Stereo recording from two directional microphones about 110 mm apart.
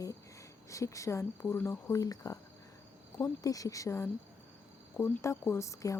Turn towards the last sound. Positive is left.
turn(degrees=30)  # may be behind; listen again after turning